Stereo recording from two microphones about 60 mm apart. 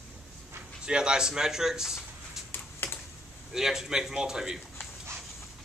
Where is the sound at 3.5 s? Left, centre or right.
Centre.